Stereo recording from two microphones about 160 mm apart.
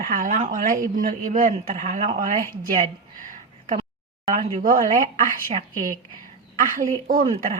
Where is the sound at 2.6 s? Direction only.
60° right (ahead or behind).